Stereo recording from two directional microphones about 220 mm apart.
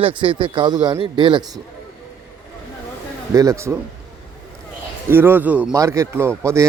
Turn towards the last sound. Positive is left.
turn(degrees=-10)  # may be behind; listen again after turning